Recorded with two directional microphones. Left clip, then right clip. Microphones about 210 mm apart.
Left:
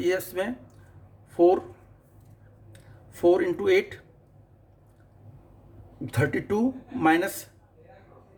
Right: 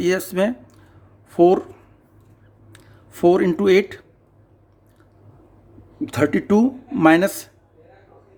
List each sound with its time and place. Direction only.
0.0 s a woman's voice: 50° right (ahead or behind)
2.7 s speech: 50° right (ahead or behind)
6.1 s speech: 50° right (ahead or behind)